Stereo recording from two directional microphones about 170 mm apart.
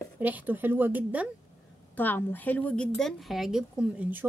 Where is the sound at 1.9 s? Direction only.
10° left (ahead or behind).